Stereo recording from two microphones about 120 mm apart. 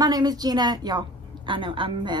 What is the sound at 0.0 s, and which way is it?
A woman's voice, 35° right (ahead or behind).